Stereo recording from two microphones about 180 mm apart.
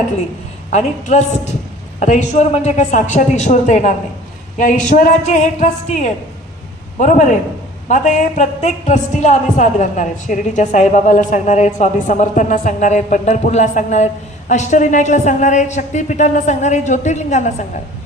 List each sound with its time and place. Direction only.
0.7 s a woman's voice: 40° left (ahead or behind)